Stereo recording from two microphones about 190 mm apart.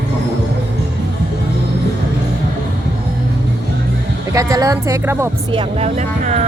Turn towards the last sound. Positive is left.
turn(degrees=-35)  # may be behind; listen again after turning